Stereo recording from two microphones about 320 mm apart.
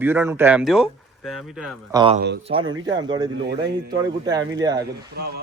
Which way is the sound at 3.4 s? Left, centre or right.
Right.